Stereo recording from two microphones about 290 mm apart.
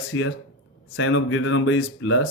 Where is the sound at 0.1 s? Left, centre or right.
Left.